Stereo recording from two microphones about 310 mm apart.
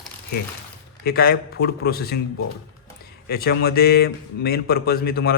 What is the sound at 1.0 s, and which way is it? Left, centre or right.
A man's voice, left.